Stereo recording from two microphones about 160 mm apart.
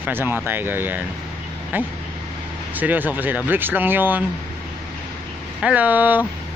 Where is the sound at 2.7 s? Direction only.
10° right (ahead or behind).